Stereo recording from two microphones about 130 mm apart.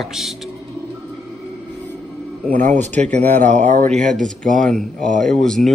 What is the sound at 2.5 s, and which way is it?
Speech, 75° right (ahead or behind).